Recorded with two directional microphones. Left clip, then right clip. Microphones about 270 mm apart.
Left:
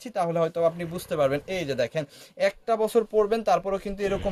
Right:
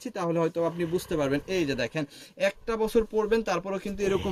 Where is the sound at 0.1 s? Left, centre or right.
Left.